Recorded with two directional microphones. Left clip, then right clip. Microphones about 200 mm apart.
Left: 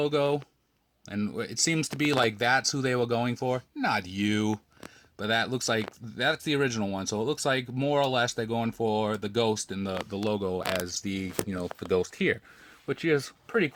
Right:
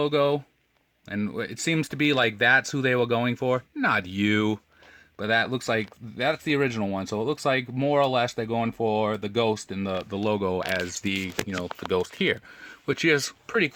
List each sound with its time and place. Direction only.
0.0 s speech: 10° right (ahead or behind); by 4.6 s 30° right (ahead or behind)
5.1 s speech: 15° right (ahead or behind)
11.0 s speech: 30° right (ahead or behind)